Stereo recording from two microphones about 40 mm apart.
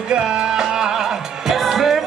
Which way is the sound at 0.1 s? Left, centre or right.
Centre.